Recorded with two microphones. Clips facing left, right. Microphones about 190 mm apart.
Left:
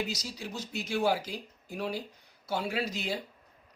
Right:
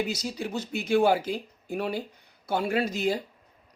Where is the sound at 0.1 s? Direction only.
55° right (ahead or behind).